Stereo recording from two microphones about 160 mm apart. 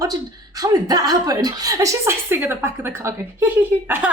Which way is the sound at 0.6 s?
25° right (ahead or behind).